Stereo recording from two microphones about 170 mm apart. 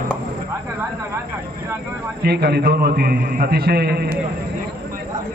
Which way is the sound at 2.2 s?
70° right (ahead or behind).